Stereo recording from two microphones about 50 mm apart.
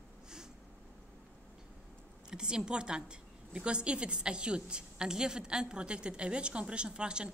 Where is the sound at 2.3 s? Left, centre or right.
Centre.